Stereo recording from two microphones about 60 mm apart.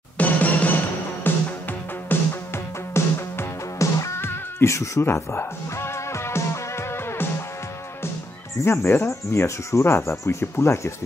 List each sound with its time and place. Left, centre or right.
0.2 s music: left
2.9 s music: left
3.8 s music: left
4.2 s music: left
8.6 s speech: left
9.7 s speech: left